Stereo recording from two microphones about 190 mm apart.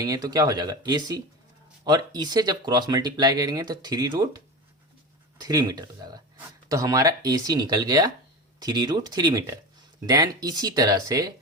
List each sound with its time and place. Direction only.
0.0 s speech: 20° right (ahead or behind)
5.4 s speech: 20° right (ahead or behind)